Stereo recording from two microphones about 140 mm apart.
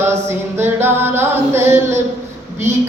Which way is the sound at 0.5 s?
15° right (ahead or behind).